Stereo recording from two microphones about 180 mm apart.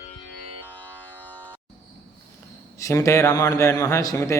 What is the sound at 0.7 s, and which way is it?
Music, 10° left (ahead or behind).